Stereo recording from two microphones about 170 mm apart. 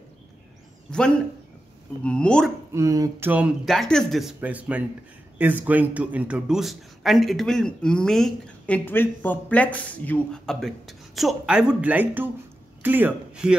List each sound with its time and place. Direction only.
0.9 s a man's voice: 5° left (ahead or behind)
2.7 s speech: 20° right (ahead or behind)
3.3 s a man's voice: 5° right (ahead or behind)